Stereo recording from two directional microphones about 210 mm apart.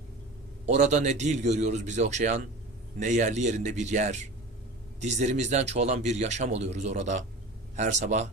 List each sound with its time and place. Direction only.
0.6 s a man's voice: 35° right (ahead or behind)